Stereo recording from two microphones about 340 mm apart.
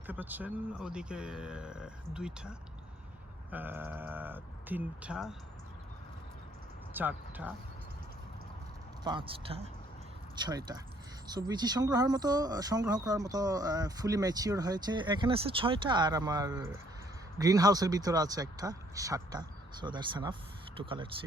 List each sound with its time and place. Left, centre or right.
0.1 s speech: centre
6.9 s speech: centre
9.0 s speech: centre